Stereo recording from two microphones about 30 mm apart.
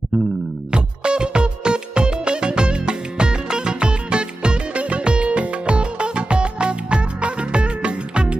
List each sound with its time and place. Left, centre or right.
0.7 s music: right